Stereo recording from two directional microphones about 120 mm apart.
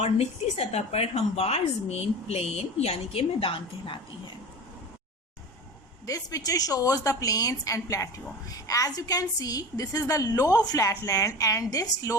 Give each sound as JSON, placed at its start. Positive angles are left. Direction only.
{"t": 0.0, "sound": "a woman's voice", "side_deg": 60}
{"t": 6.1, "sound": "a woman's voice", "side_deg": 30}